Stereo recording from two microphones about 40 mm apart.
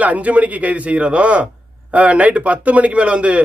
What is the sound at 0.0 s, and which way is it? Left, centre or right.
A man's voice, right.